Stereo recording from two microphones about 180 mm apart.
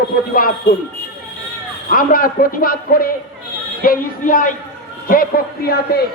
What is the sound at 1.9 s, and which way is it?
A man's voice, 50° left (ahead or behind).